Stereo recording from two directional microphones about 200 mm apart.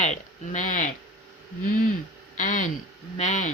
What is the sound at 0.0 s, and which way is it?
Speech, 35° left (ahead or behind).